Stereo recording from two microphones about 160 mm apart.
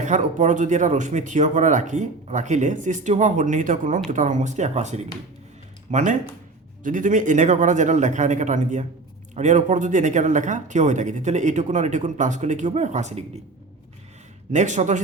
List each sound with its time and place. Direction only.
0.0 s speech: 50° right (ahead or behind)
14.5 s speech: 50° right (ahead or behind)